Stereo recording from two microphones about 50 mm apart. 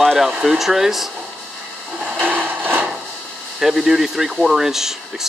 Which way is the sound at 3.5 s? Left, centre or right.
Centre.